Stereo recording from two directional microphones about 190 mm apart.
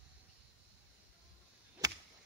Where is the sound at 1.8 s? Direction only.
20° right (ahead or behind).